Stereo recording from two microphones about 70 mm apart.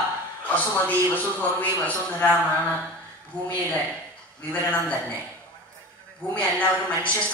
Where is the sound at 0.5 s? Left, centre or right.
Left.